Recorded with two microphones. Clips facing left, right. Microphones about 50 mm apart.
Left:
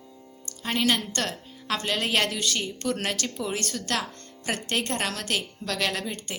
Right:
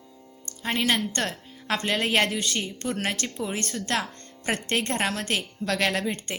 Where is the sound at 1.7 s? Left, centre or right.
Right.